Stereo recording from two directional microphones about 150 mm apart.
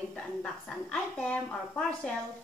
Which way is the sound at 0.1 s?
5° left (ahead or behind).